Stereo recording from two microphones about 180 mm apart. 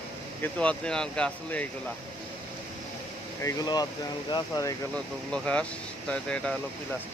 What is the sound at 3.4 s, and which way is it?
Speech, 20° left (ahead or behind).